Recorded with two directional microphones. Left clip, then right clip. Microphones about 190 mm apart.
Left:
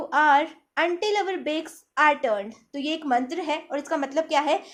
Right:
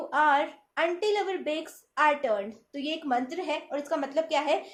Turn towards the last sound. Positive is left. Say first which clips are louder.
# left 4 dB
turn(degrees=50)  # may be behind; listen again after turning